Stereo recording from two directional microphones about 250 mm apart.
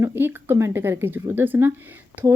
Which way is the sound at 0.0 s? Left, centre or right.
Centre.